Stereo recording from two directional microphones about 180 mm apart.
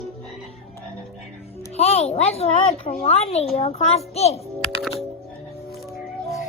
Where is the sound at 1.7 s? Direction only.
35° left (ahead or behind).